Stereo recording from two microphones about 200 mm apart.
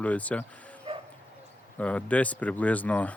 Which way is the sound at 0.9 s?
30° right (ahead or behind).